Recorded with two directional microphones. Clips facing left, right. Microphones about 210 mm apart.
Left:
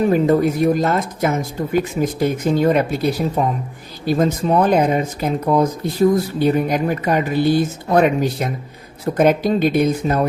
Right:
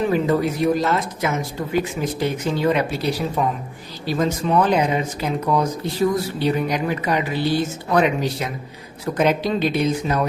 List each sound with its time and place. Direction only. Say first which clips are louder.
0.0 s speech: left 4 dB; 45° left (ahead or behind)